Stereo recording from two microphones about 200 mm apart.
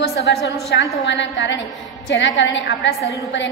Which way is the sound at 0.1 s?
55° left (ahead or behind).